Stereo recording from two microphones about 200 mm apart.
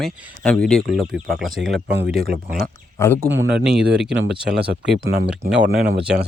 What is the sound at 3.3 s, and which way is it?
Speech, 65° right (ahead or behind).